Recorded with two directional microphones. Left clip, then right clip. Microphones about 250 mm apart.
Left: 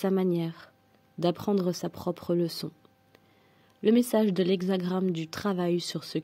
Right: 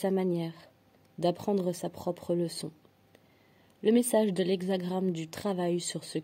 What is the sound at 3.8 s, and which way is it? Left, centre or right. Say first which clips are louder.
Speech: left 1 dB; left.